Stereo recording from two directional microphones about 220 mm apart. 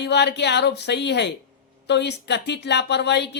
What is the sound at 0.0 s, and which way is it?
A woman's voice, 50° left (ahead or behind).